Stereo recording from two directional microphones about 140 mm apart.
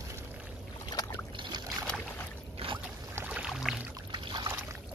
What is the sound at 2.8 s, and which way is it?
Boat, 10° right (ahead or behind).